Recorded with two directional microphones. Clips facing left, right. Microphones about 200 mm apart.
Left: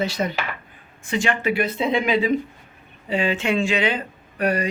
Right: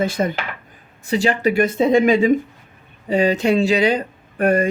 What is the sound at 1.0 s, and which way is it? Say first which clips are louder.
Speech: right 5 dB; 35° right (ahead or behind).